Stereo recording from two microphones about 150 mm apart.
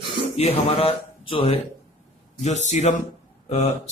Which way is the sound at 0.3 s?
40° left (ahead or behind).